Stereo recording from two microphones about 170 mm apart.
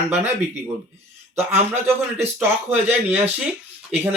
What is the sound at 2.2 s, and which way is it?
Speech, 15° right (ahead or behind).